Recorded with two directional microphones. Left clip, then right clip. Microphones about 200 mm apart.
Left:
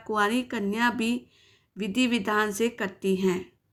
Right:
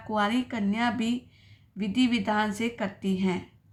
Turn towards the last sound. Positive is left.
turn(degrees=20)  # may be behind; listen again after turning